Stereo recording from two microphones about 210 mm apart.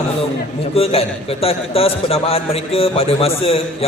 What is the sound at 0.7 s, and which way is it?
A man's voice, 30° left (ahead or behind).